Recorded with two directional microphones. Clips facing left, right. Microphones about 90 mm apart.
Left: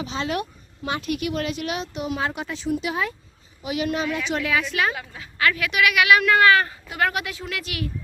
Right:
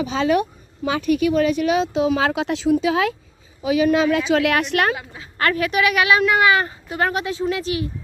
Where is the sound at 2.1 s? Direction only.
90° right.